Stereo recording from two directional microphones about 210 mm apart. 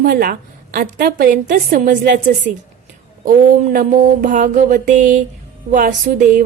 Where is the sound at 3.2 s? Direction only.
40° right (ahead or behind).